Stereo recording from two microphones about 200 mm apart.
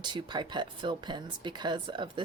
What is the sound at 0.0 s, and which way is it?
A woman's voice, 20° right (ahead or behind).